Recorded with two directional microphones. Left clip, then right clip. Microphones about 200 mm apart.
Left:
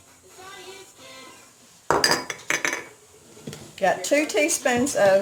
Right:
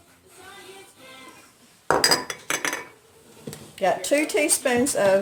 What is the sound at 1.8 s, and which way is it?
Cutlery, 5° right (ahead or behind).